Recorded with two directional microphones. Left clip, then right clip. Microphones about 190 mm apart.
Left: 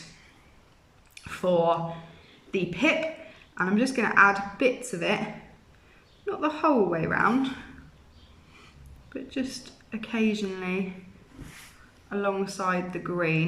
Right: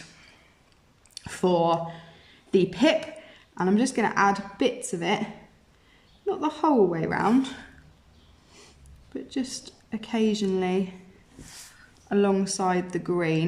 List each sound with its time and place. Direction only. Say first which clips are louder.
1.2 s a woman's voice: right 1 dB; 35° right (ahead or behind)
6.2 s a woman's voice: right 1 dB; 25° right (ahead or behind)
9.1 s a woman's voice: right 1 dB; 25° right (ahead or behind)
12.0 s speech: right 4 dB; 35° right (ahead or behind)